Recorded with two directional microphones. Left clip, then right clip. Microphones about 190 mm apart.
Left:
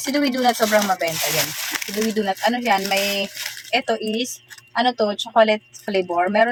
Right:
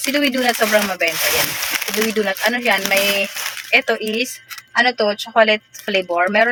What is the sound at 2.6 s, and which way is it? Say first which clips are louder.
Speech: right 3 dB; 10° right (ahead or behind).